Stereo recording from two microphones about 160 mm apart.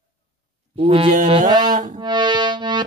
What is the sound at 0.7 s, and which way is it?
Music, 35° right (ahead or behind).